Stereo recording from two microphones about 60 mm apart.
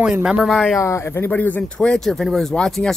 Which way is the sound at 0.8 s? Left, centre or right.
Left.